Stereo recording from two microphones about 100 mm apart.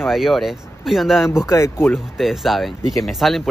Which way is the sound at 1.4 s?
30° left (ahead or behind).